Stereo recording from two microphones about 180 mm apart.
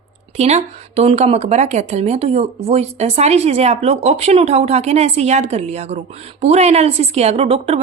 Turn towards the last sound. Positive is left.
turn(degrees=-30)  # may be behind; listen again after turning